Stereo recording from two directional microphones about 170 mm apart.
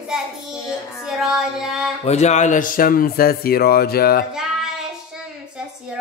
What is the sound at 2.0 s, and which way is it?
Speech, 40° left (ahead or behind).